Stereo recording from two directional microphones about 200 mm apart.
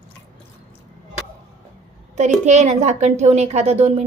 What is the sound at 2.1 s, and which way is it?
A woman's voice, 35° right (ahead or behind).